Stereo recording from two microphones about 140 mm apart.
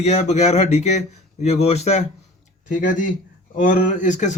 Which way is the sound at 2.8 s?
75° left (ahead or behind).